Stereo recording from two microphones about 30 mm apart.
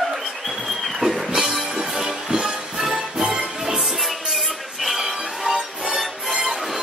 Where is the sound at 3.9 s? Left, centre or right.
Centre.